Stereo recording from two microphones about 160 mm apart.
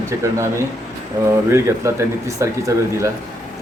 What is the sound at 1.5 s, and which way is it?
Speech, 15° right (ahead or behind).